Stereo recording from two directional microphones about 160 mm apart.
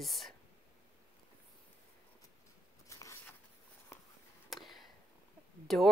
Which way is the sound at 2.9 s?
20° left (ahead or behind).